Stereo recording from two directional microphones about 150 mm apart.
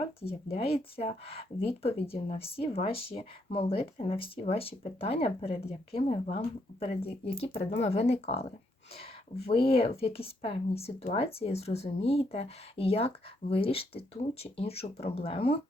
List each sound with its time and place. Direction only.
0.2 s speech: 40° left (ahead or behind)